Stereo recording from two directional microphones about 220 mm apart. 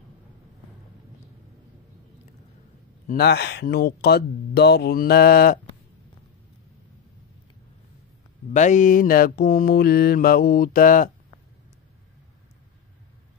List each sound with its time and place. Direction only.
3.1 s speech: 45° left (ahead or behind)
8.5 s mantra: 35° left (ahead or behind)